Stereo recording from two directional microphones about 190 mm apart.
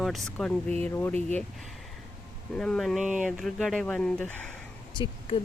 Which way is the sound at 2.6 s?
5° left (ahead or behind).